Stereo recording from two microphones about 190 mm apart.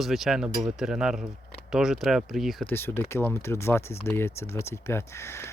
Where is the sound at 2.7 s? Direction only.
10° left (ahead or behind).